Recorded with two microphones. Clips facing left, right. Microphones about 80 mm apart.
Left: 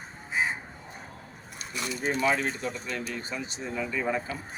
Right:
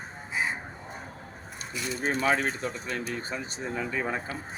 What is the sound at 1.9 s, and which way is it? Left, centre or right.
A man's voice, right.